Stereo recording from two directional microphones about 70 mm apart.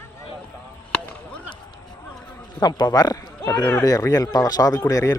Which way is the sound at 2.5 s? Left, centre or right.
Left.